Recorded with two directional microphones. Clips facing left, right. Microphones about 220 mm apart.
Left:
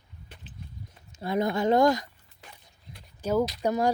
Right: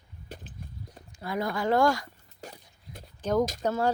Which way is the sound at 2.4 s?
40° right (ahead or behind).